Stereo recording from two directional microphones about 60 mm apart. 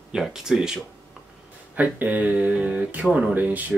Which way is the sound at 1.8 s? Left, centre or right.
Right.